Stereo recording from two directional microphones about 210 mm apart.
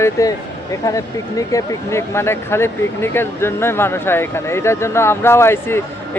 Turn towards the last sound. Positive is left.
turn(degrees=10)  # may be behind; listen again after turning